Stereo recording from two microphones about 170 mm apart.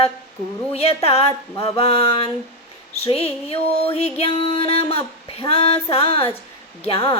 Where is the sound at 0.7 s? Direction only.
35° left (ahead or behind).